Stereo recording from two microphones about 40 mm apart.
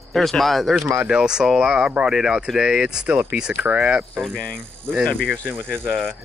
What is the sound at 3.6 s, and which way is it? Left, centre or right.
Speech, right.